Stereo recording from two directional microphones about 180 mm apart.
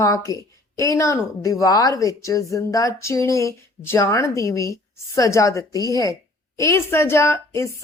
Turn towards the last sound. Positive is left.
turn(degrees=15)  # may be behind; listen again after turning